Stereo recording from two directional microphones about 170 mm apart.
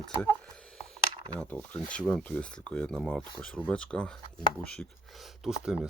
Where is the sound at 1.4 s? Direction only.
10° left (ahead or behind).